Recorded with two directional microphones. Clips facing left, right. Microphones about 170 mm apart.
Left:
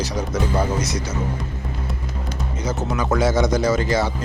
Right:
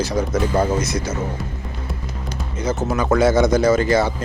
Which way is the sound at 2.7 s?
55° right (ahead or behind).